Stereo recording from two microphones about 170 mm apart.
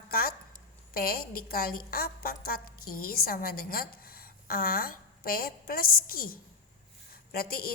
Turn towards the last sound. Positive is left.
turn(degrees=60)  # may be behind; listen again after turning